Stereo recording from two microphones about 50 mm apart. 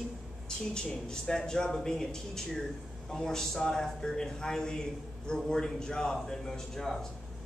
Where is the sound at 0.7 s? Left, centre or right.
Centre.